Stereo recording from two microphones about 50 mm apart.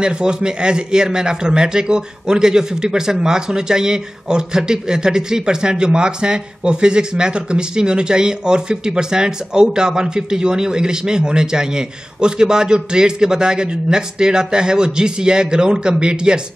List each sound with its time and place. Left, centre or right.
0.0 s a man's voice: centre